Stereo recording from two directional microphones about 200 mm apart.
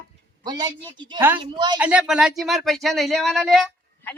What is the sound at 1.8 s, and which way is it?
Speech, 5° right (ahead or behind).